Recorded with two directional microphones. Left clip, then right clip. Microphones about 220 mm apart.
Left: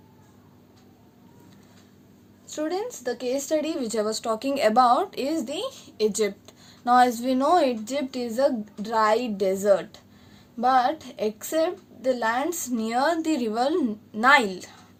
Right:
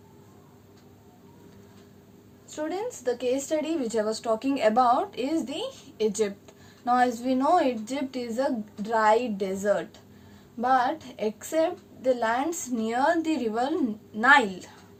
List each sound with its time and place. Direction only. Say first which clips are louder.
2.5 s a woman's voice: left 3 dB; 35° left (ahead or behind)